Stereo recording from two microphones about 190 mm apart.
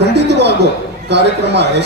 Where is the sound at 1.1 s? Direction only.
60° right (ahead or behind).